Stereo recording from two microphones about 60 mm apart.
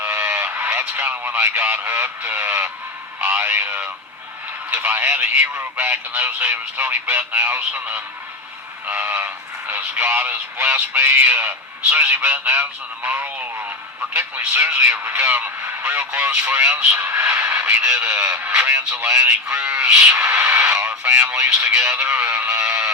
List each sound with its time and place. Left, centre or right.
0.0 s speech: right
17.5 s radio: right
17.9 s speech: right
19.1 s speech: centre
22.4 s a sound: centre